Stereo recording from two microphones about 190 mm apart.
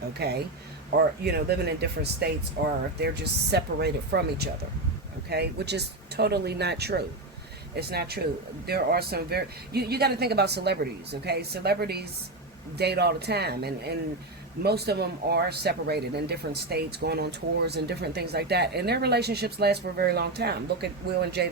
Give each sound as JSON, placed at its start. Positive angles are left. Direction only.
{"t": 0.2, "sound": "speech", "side_deg": -60}